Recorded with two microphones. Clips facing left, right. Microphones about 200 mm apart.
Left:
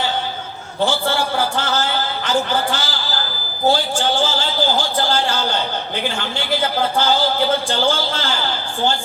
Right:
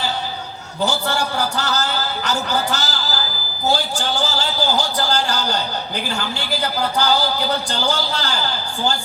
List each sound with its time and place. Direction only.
0.9 s a man's voice: 40° right (ahead or behind)